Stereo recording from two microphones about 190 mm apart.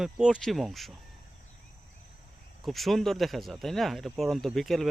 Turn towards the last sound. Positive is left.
turn(degrees=0)  # may be behind; listen again after turning